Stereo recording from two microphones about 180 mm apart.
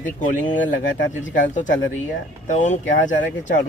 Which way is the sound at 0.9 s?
90° left.